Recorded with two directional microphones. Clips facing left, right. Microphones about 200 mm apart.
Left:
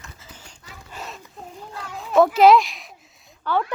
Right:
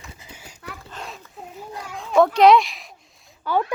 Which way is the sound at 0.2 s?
10° right (ahead or behind).